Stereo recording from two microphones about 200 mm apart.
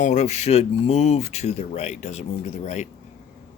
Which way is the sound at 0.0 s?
35° left (ahead or behind).